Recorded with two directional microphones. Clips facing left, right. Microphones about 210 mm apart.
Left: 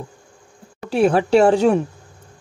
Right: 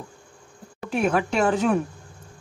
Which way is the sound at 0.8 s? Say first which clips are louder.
Left 6 dB; 30° left (ahead or behind).